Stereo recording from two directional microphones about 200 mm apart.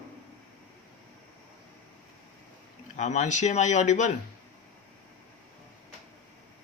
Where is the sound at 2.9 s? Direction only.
35° left (ahead or behind).